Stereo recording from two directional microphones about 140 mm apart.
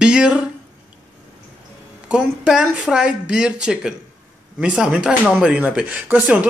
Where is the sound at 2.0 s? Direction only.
5° right (ahead or behind).